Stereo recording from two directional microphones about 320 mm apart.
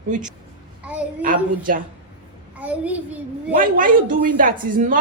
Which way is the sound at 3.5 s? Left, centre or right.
Right.